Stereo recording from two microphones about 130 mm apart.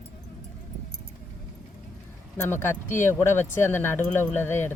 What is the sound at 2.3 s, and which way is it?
Speech, 15° left (ahead or behind).